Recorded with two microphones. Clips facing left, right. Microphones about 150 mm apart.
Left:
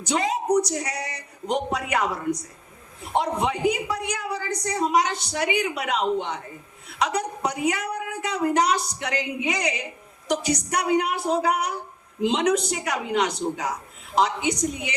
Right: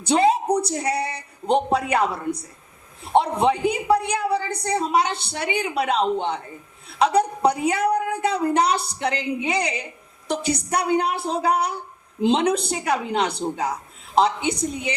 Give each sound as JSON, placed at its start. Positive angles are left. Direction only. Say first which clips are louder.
{"t": 0.0, "sound": "speech", "louder": "right 6 dB", "side_deg": -30}